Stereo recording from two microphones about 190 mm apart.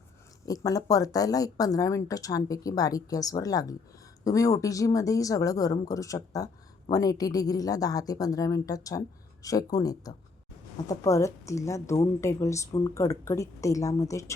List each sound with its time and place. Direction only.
0.4 s a woman's voice: 20° left (ahead or behind)